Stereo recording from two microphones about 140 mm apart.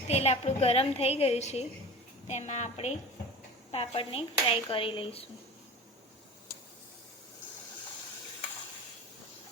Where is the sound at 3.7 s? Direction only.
40° left (ahead or behind).